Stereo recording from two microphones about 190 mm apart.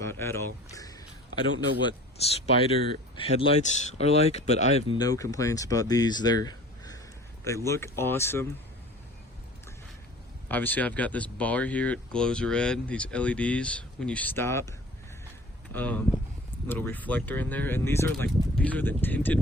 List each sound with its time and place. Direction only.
0.0 s a sound: 15° left (ahead or behind)
1.8 s speech: 25° left (ahead or behind)
4.9 s speech: 20° left (ahead or behind)
10.5 s speech: 10° left (ahead or behind)